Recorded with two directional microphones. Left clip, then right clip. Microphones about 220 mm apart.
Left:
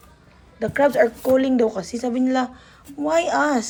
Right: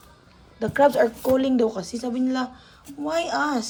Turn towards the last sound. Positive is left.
turn(degrees=-5)  # may be behind; listen again after turning